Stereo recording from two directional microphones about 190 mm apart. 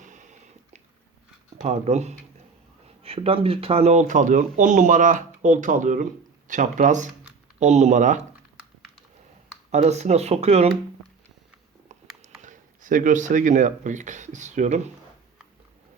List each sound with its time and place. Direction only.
1.5 s speech: 35° right (ahead or behind)
9.7 s speech: 35° right (ahead or behind)
12.4 s speech: 45° right (ahead or behind)